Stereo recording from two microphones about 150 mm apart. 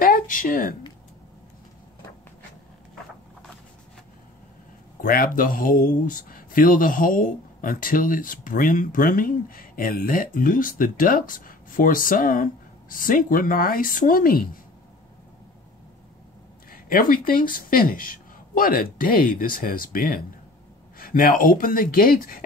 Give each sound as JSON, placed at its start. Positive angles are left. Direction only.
{"t": 0.0, "sound": "a sound", "side_deg": 65}
{"t": 5.0, "sound": "speech", "side_deg": 75}
{"t": 16.9, "sound": "speech", "side_deg": 70}